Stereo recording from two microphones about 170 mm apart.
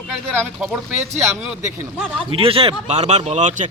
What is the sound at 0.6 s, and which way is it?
Speech, 10° right (ahead or behind).